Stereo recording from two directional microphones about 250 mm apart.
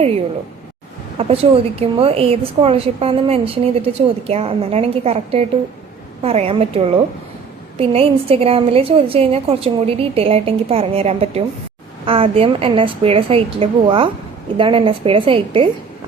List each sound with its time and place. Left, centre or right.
1.2 s a woman's voice: right